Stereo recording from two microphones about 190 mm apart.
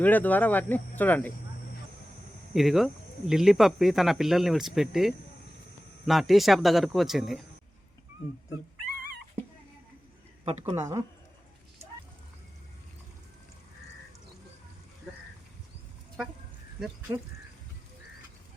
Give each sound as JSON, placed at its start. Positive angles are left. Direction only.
{"t": 0.0, "sound": "speech", "side_deg": 10}
{"t": 2.5, "sound": "speech", "side_deg": 0}
{"t": 10.4, "sound": "speech", "side_deg": -30}
{"t": 10.8, "sound": "speech", "side_deg": -15}